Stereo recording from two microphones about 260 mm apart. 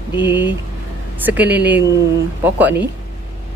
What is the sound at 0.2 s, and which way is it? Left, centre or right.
A woman's voice, centre.